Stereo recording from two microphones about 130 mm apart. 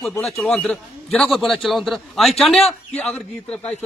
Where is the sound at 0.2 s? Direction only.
5° left (ahead or behind).